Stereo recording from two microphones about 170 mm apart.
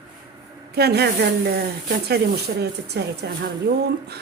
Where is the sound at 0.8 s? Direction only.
70° right (ahead or behind).